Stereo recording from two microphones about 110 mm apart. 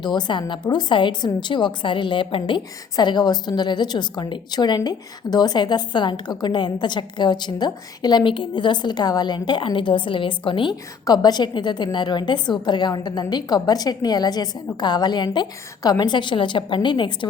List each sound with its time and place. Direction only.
0.0 s a woman's voice: 45° left (ahead or behind)
11.0 s a woman's voice: 40° left (ahead or behind)